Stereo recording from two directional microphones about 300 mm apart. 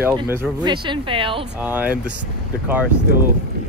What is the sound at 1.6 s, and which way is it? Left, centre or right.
Speech, centre.